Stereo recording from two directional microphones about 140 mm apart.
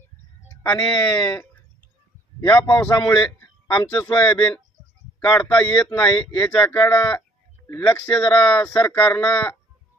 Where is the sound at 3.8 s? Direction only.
30° left (ahead or behind).